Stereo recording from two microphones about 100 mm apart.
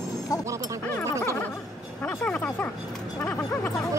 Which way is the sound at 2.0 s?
15° left (ahead or behind).